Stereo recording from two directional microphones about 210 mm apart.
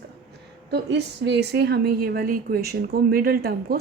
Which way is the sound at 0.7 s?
55° right (ahead or behind).